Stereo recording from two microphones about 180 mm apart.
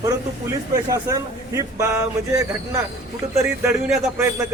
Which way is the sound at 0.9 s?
20° right (ahead or behind).